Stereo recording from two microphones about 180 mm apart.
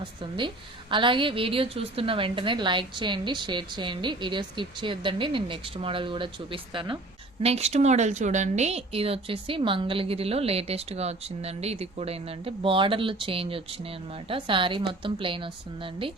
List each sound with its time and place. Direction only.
0.0 s a woman's voice: 25° right (ahead or behind)